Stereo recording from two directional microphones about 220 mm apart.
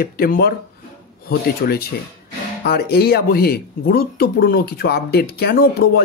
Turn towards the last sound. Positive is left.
turn(degrees=45)  # may be behind; listen again after turning